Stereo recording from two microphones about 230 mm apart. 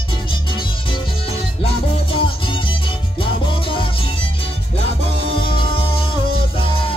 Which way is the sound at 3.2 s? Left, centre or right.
Left.